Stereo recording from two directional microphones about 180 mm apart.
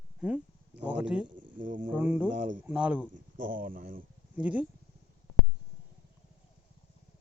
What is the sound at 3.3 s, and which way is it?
Speech, 50° right (ahead or behind).